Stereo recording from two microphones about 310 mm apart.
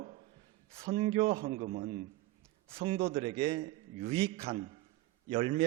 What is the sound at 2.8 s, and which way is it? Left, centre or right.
A man's voice, centre.